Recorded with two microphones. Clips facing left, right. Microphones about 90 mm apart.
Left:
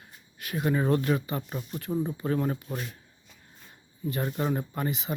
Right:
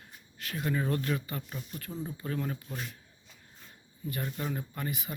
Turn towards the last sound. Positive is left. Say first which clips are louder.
# left 6 dB
turn(degrees=20)  # may be behind; listen again after turning